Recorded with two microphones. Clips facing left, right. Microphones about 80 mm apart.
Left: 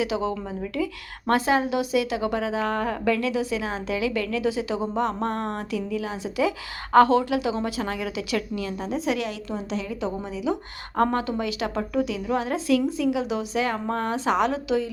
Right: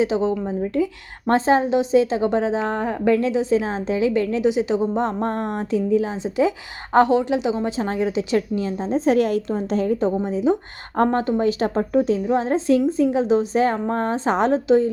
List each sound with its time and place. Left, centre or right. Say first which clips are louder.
0.0 s a woman's voice: right 6 dB; right